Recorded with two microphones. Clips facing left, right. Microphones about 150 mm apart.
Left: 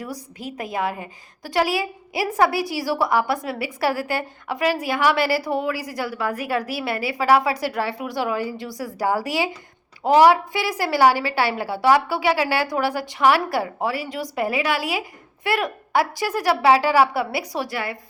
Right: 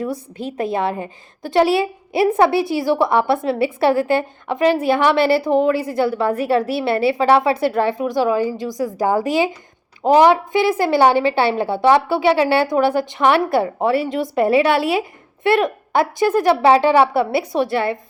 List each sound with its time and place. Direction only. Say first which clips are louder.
0.0 s a woman's voice: right 8 dB; 25° right (ahead or behind)